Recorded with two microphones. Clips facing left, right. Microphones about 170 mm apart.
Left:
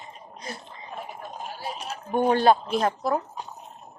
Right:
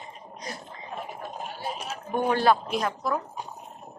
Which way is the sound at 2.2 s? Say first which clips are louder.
Left 3 dB; 25° left (ahead or behind).